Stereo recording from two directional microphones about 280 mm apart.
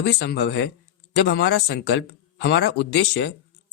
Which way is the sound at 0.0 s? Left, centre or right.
Left.